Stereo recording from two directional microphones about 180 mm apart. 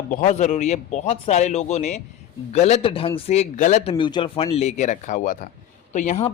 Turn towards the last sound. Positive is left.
turn(degrees=40)  # may be behind; listen again after turning